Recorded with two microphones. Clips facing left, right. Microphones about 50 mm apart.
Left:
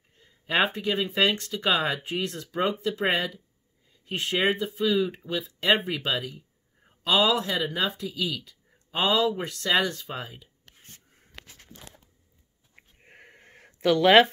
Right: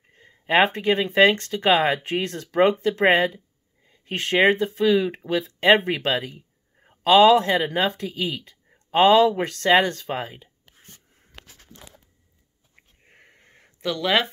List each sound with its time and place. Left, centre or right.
0.1 s speech: right
13.0 s a sound: left
13.7 s speech: left